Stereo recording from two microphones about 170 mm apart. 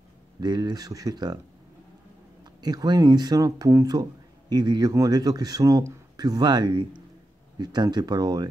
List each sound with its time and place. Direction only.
0.4 s speech: 25° right (ahead or behind)
2.4 s speech: 25° right (ahead or behind)